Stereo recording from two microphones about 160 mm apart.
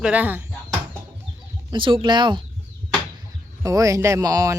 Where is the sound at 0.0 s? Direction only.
10° right (ahead or behind).